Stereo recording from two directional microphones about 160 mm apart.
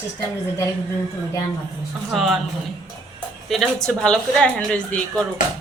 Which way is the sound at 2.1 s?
Centre (ahead or behind).